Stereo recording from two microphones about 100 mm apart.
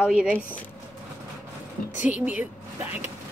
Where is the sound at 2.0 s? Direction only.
15° right (ahead or behind).